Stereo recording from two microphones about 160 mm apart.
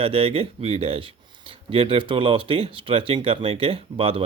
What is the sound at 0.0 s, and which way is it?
Speech, 35° right (ahead or behind).